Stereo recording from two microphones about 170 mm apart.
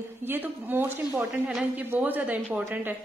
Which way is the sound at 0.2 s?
10° right (ahead or behind).